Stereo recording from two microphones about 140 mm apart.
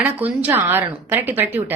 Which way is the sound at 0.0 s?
10° right (ahead or behind).